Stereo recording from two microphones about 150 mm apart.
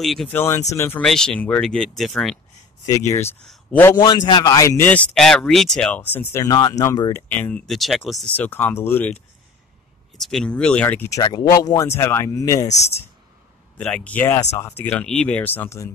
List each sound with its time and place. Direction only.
0.0 s speech: centre (ahead or behind)
0.3 s speech: 15° left (ahead or behind)
1.0 s speech: 5° left (ahead or behind)
2.9 s speech: 20° left (ahead or behind)
6.5 s speech: 25° left (ahead or behind); by 8.3 s centre (ahead or behind)
8.4 s speech: 15° left (ahead or behind)
12.6 s speech: 45° left (ahead or behind)
13.7 s speech: 10° left (ahead or behind)